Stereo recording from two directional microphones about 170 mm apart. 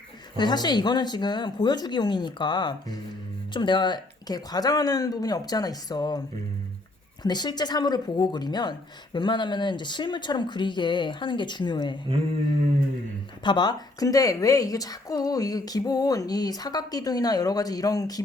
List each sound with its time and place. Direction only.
0.3 s a woman's voice: 25° left (ahead or behind)
13.4 s a woman's voice: 25° left (ahead or behind)